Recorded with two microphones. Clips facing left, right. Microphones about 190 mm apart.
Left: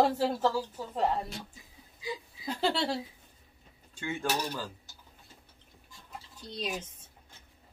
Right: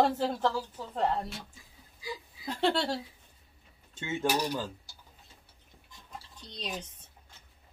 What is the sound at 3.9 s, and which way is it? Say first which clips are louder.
Speech: right 2 dB; 20° right (ahead or behind).